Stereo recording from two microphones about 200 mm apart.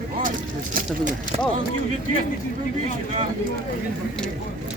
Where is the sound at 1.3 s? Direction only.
30° right (ahead or behind).